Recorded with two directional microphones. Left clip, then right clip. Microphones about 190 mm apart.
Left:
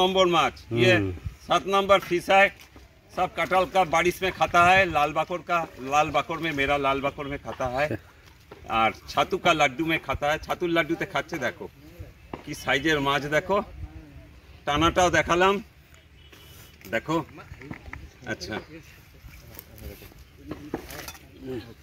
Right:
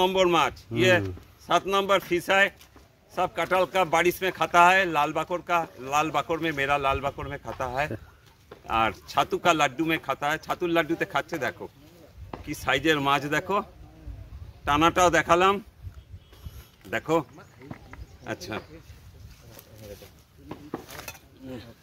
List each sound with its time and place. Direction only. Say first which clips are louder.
0.0 s speech: left 1 dB; 20° right (ahead or behind)
16.9 s speech: right 2 dB; 10° right (ahead or behind)
18.2 s speech: left 1 dB; 10° right (ahead or behind)